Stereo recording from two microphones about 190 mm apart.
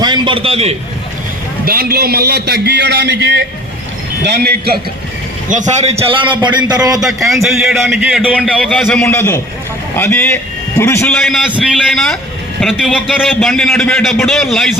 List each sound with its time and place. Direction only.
0.0 s a man's voice: 25° right (ahead or behind)
1.6 s a man's voice: 50° right (ahead or behind)
5.5 s a man's voice: 40° right (ahead or behind); by 6.7 s 25° right (ahead or behind)
7.0 s a man's voice: centre (ahead or behind)
11.1 s a man's voice: centre (ahead or behind)